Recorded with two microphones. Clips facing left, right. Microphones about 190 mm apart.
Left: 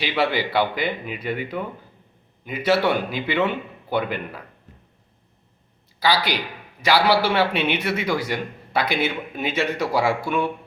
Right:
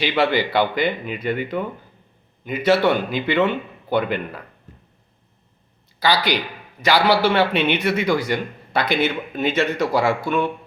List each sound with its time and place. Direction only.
0.0 s a man's voice: 5° left (ahead or behind)
6.0 s a man's voice: 5° left (ahead or behind)